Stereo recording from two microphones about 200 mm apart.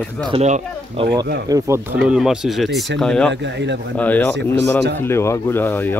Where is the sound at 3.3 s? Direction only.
60° right (ahead or behind).